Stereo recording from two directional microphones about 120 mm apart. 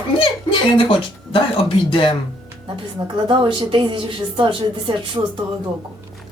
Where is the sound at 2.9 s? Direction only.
45° right (ahead or behind).